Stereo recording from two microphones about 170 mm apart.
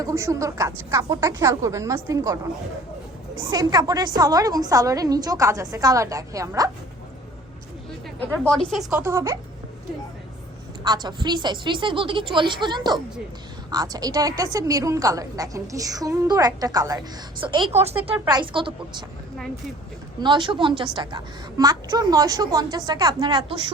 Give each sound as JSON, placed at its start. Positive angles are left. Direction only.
{"t": 0.0, "sound": "a woman's voice", "side_deg": -15}
{"t": 3.5, "sound": "a woman's voice", "side_deg": -25}
{"t": 8.4, "sound": "speech", "side_deg": 5}
{"t": 8.9, "sound": "speech", "side_deg": -15}
{"t": 10.8, "sound": "a woman's voice", "side_deg": -25}
{"t": 20.1, "sound": "a woman's voice", "side_deg": -25}